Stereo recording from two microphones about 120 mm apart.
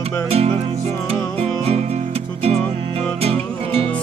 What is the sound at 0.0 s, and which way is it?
Music, 60° right (ahead or behind).